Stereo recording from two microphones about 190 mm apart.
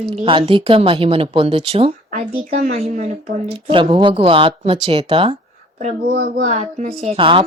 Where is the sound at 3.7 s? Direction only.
25° right (ahead or behind).